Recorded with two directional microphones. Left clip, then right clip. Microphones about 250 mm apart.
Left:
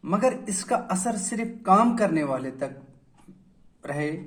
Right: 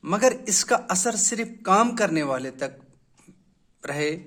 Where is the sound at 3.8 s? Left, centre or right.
Right.